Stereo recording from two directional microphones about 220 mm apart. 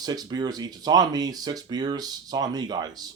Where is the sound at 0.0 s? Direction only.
20° right (ahead or behind).